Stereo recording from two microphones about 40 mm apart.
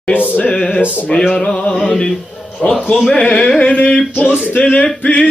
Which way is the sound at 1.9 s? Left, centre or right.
Centre.